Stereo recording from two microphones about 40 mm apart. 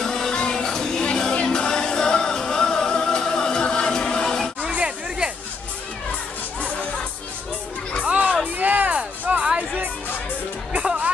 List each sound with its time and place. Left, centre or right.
0.0 s music: centre
0.3 s music: left
0.7 s music: centre
4.7 s a sound: right
8.0 s music: right
8.5 s music: right
10.7 s music: right